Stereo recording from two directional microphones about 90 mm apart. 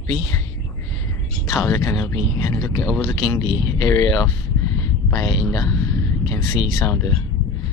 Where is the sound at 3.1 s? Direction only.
45° left (ahead or behind).